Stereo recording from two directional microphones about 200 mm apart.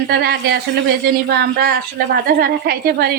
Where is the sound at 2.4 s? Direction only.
50° right (ahead or behind).